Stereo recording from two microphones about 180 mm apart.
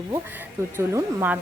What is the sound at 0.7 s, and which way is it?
Speech, 10° right (ahead or behind).